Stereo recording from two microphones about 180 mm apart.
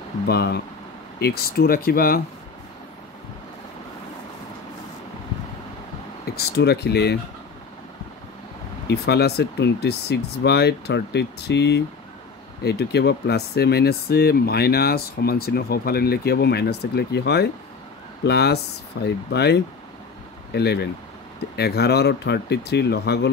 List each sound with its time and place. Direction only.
0.3 s speech: 65° left (ahead or behind)
6.2 s speech: 65° left (ahead or behind)
8.8 s speech: 70° left (ahead or behind)